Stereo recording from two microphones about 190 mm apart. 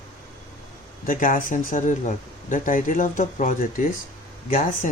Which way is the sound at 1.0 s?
45° left (ahead or behind).